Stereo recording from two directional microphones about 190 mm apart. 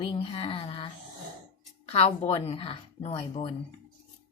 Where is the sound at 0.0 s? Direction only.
25° left (ahead or behind).